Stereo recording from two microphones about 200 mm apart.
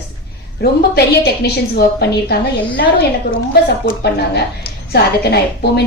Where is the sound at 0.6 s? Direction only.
55° left (ahead or behind).